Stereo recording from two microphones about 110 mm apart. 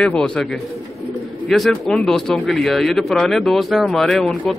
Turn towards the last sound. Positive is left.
turn(degrees=0)  # may be behind; listen again after turning